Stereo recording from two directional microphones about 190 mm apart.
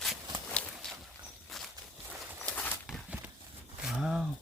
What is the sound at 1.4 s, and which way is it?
Walk, centre (ahead or behind).